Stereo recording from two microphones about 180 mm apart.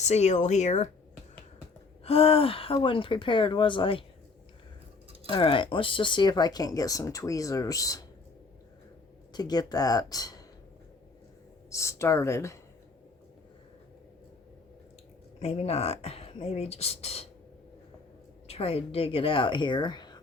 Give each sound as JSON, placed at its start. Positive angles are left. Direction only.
{"t": 0.0, "sound": "speech", "side_deg": 40}
{"t": 2.0, "sound": "speech", "side_deg": 30}
{"t": 5.3, "sound": "speech", "side_deg": 30}
{"t": 9.3, "sound": "speech", "side_deg": 20}
{"t": 11.7, "sound": "speech", "side_deg": 15}
{"t": 15.4, "sound": "speech", "side_deg": 35}
{"t": 18.4, "sound": "speech", "side_deg": 35}